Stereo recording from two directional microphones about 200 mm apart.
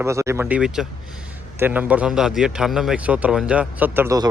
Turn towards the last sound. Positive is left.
turn(degrees=-15)  # may be behind; listen again after turning